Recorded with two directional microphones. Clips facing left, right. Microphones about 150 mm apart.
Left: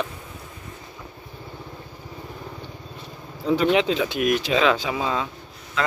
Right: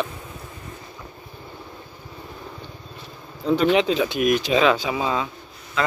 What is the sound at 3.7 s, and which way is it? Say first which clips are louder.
Speech: right 1 dB; 15° right (ahead or behind).